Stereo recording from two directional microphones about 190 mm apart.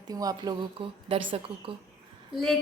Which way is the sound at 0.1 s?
20° right (ahead or behind).